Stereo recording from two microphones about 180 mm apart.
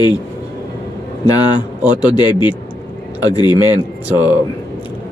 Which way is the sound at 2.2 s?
25° left (ahead or behind).